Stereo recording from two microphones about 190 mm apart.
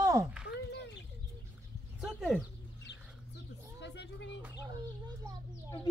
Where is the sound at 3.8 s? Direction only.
65° left (ahead or behind).